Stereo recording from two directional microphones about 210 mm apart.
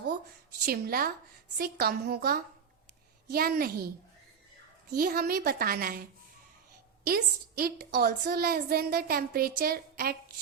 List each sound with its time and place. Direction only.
0.6 s a woman's voice: 45° right (ahead or behind)
4.9 s a woman's voice: 45° right (ahead or behind)
7.0 s a woman's voice: 45° right (ahead or behind)